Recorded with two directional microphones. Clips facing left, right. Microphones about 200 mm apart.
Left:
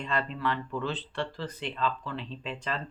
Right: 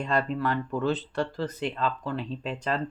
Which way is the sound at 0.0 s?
45° right (ahead or behind).